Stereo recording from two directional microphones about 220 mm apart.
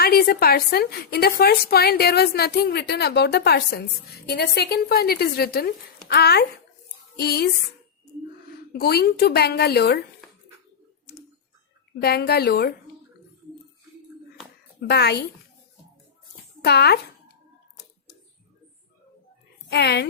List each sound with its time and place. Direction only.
0.0 s a woman's voice: 45° left (ahead or behind)
8.7 s a woman's voice: 45° left (ahead or behind)
11.9 s a woman's voice: 45° left (ahead or behind)
14.8 s a woman's voice: 50° left (ahead or behind)
16.6 s speech: 50° left (ahead or behind)
19.7 s a woman's voice: 50° left (ahead or behind)